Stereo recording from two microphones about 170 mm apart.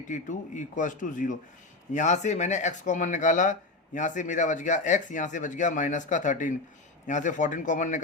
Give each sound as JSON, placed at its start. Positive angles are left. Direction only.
{"t": 0.1, "sound": "speech", "side_deg": 45}